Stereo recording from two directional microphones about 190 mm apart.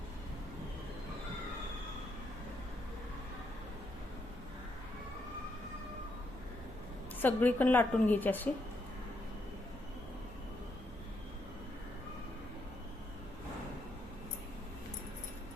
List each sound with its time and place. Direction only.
7.2 s a woman's voice: 10° left (ahead or behind)